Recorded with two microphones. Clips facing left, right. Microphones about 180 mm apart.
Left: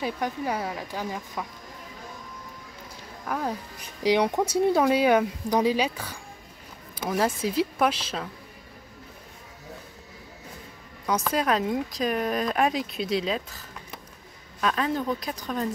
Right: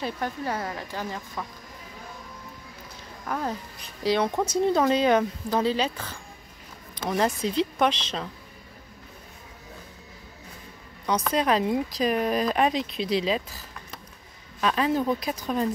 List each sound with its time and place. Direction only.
0.0 s speech: 10° left (ahead or behind)
3.3 s speech: 5° left (ahead or behind)
4.0 s speech: 15° left (ahead or behind)
11.1 s speech: 5° left (ahead or behind)
14.6 s speech: 5° right (ahead or behind)